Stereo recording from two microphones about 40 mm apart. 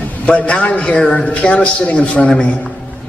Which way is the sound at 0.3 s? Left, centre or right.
Left.